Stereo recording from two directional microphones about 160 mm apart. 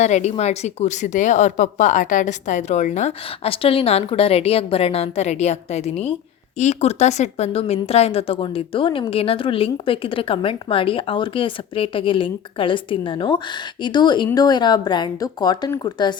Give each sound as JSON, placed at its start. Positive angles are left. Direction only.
{"t": 0.0, "sound": "a woman's voice", "side_deg": 45}